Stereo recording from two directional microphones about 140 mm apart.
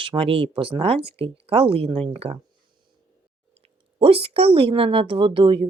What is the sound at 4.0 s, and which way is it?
Speech, 40° right (ahead or behind).